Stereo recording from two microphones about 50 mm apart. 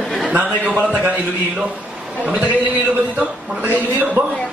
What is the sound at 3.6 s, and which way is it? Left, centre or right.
Speech, right.